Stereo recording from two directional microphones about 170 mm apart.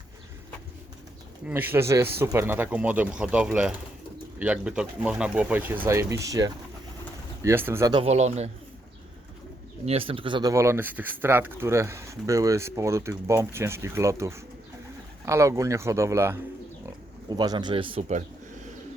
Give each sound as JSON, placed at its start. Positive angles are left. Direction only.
{"t": 1.5, "sound": "speech", "side_deg": -10}
{"t": 8.0, "sound": "speech", "side_deg": -40}
{"t": 9.8, "sound": "speech", "side_deg": -35}